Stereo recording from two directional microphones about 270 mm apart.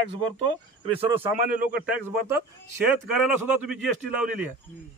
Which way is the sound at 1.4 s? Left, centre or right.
Right.